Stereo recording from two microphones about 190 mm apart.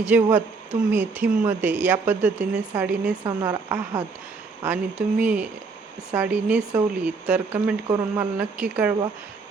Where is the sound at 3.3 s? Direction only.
20° right (ahead or behind).